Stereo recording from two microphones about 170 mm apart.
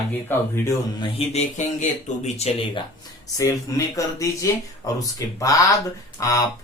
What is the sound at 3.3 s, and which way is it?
Speech, 20° left (ahead or behind).